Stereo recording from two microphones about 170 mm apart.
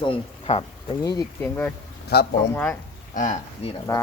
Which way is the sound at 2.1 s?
75° left (ahead or behind).